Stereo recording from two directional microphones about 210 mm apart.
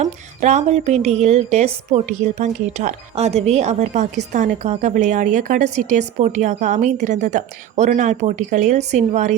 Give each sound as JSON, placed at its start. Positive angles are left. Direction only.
{"t": 0.0, "sound": "a woman's voice", "side_deg": -35}